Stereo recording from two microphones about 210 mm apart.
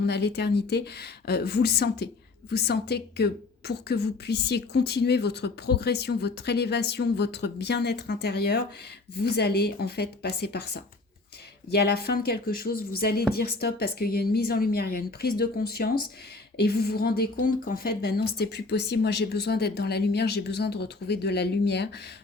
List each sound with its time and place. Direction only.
0.0 s speech: 55° left (ahead or behind)
11.7 s speech: 50° left (ahead or behind)